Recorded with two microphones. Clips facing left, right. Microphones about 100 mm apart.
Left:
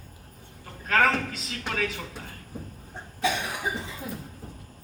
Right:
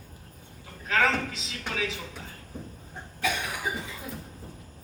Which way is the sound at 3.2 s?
25° left (ahead or behind).